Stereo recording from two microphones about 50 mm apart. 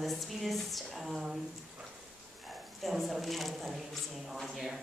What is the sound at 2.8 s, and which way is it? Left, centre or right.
A woman's voice, centre.